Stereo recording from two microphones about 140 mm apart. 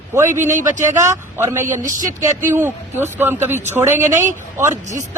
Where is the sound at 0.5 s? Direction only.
65° right (ahead or behind).